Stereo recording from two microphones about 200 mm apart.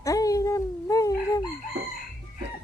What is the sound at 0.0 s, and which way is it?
Baby cry, 15° left (ahead or behind).